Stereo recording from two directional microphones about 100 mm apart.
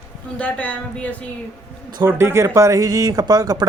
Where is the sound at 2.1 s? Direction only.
25° right (ahead or behind).